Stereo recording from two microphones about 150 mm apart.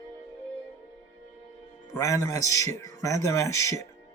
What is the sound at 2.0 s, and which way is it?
A man's voice, 20° left (ahead or behind).